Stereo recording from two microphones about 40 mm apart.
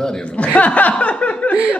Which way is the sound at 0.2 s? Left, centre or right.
Left.